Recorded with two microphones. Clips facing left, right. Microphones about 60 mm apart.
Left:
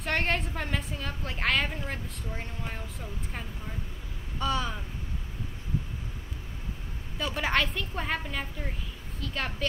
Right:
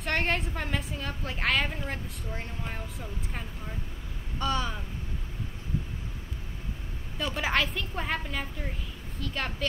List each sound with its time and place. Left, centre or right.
0.0 s a woman's voice: centre
7.2 s a woman's voice: centre